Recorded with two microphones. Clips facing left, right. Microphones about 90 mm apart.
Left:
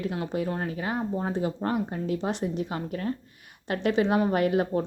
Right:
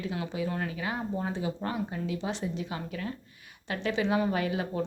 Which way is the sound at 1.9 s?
45° left (ahead or behind).